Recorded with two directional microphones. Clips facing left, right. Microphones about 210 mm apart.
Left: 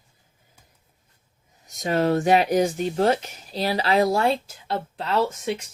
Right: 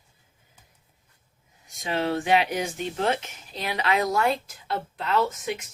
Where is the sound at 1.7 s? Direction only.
45° left (ahead or behind).